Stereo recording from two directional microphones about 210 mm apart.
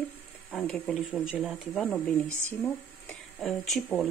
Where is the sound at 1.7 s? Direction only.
5° left (ahead or behind).